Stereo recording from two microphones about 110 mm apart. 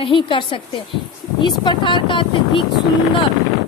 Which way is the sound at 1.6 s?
45° left (ahead or behind).